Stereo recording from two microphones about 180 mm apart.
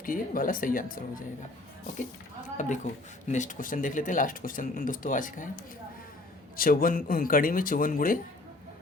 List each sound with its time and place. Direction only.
0.0 s speech: 50° left (ahead or behind)
2.6 s speech: 45° left (ahead or behind)
6.6 s speech: 55° left (ahead or behind)